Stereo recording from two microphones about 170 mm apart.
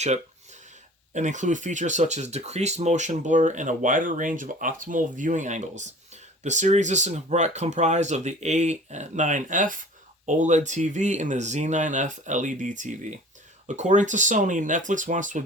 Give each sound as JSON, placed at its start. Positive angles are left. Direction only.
{"t": 1.1, "sound": "speech", "side_deg": -45}